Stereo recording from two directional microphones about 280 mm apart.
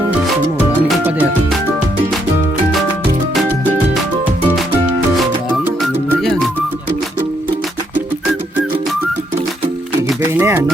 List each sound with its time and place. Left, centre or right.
0.9 s music: centre
5.1 s music: centre
7.9 s music: centre
10.3 s a sound: centre